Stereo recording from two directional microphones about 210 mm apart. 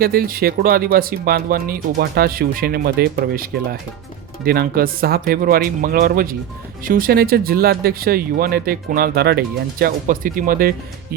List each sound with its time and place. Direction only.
0.0 s speech: 45° right (ahead or behind)